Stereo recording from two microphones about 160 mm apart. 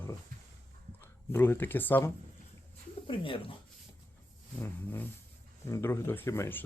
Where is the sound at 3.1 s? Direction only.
35° left (ahead or behind).